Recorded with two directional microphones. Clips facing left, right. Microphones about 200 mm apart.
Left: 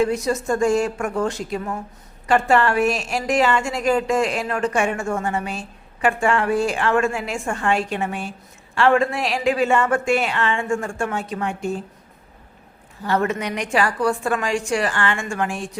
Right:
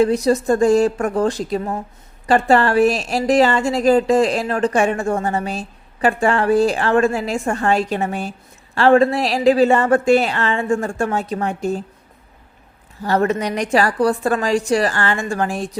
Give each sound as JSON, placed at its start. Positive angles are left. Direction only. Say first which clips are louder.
{"t": 0.0, "sound": "a woman's voice", "louder": "right 5 dB", "side_deg": -35}
{"t": 13.1, "sound": "a woman's voice", "louder": "right 4 dB", "side_deg": -35}